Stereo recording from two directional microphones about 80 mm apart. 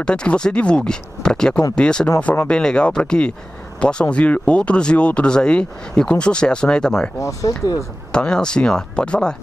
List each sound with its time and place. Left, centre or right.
0.0 s speech: centre
7.2 s speech: left
8.1 s speech: centre